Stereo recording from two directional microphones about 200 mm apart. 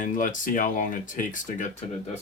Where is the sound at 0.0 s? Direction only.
40° left (ahead or behind).